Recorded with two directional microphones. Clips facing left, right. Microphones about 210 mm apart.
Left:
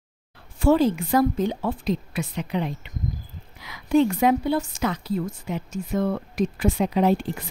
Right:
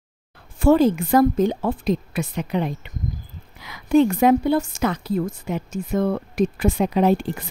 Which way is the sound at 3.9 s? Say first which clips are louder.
Right 3 dB; 50° right (ahead or behind).